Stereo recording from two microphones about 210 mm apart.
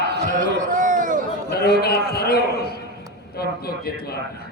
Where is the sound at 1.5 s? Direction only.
50° left (ahead or behind).